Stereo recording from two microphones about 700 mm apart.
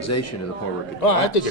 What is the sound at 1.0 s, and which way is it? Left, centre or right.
Speech, left.